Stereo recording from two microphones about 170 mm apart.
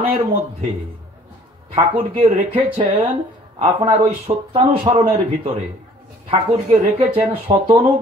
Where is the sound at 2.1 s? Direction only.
30° right (ahead or behind).